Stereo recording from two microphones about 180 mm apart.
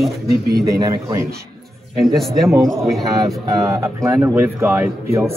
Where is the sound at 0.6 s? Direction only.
20° right (ahead or behind).